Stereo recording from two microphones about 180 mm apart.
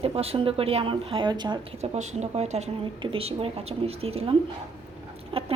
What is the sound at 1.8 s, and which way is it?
A woman's voice, 40° right (ahead or behind).